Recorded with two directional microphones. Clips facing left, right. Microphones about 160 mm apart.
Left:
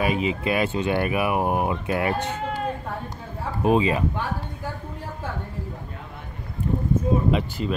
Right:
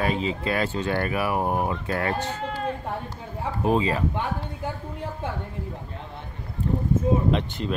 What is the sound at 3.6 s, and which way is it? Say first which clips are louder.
Speech: left 3 dB; 20° left (ahead or behind).